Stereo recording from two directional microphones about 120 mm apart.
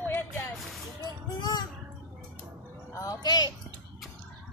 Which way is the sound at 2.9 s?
30° left (ahead or behind).